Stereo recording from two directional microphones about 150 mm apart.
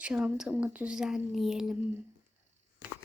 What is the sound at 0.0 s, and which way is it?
Speech, 10° right (ahead or behind).